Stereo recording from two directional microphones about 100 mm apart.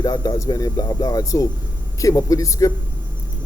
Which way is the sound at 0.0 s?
40° left (ahead or behind).